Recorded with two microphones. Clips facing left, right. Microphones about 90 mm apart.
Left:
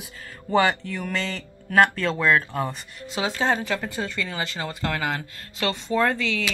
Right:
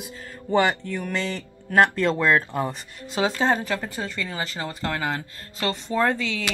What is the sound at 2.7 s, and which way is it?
Speech, 40° right (ahead or behind).